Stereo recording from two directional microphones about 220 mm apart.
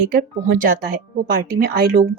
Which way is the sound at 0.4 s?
40° right (ahead or behind).